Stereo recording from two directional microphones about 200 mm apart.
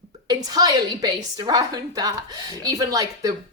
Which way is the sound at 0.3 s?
20° right (ahead or behind).